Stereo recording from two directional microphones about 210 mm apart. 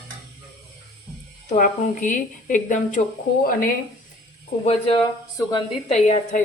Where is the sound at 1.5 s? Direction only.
40° left (ahead or behind).